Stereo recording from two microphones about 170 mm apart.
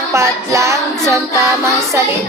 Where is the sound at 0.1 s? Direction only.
15° right (ahead or behind).